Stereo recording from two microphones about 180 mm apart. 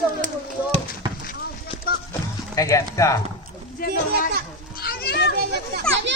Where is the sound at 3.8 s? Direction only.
55° left (ahead or behind).